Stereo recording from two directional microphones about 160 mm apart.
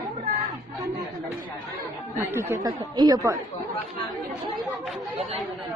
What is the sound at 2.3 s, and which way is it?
Speech, 20° right (ahead or behind).